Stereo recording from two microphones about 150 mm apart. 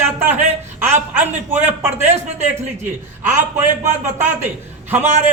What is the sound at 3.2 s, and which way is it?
A man's voice, 15° right (ahead or behind).